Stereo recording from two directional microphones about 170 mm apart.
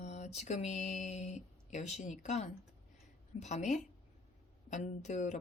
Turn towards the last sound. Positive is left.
turn(degrees=45)  # may be behind; listen again after turning